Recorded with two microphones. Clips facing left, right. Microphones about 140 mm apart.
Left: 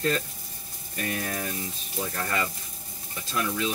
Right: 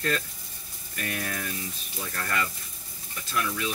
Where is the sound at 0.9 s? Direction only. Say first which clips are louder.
Left 2 dB; 20° left (ahead or behind).